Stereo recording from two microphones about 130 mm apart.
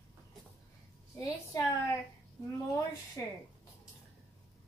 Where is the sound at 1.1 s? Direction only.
25° left (ahead or behind).